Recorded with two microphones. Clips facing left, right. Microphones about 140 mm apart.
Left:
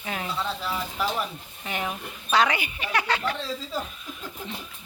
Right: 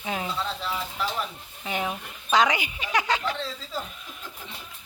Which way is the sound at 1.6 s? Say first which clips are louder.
Right 1 dB; 15° right (ahead or behind).